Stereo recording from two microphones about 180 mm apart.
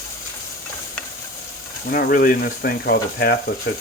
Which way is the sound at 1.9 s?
55° left (ahead or behind).